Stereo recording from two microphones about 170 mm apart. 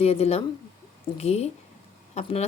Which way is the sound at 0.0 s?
35° left (ahead or behind).